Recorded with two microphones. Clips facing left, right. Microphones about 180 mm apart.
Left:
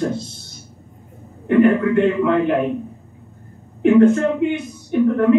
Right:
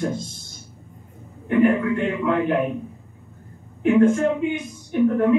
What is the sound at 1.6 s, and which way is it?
Speech, 70° left (ahead or behind).